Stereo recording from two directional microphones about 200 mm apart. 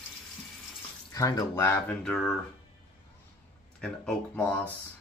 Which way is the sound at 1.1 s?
20° left (ahead or behind).